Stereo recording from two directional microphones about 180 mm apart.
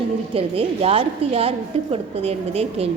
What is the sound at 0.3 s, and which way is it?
A woman's voice, 35° right (ahead or behind).